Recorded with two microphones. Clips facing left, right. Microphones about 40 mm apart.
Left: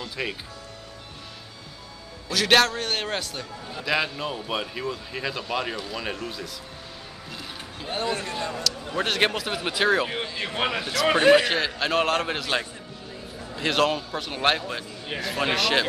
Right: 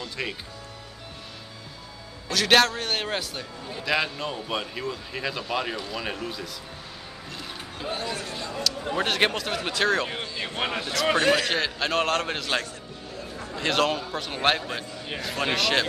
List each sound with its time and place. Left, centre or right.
0.0 s a man's voice: centre
2.2 s a man's voice: centre
7.9 s a sound: left
8.9 s a man's voice: centre
11.1 s a man's voice: centre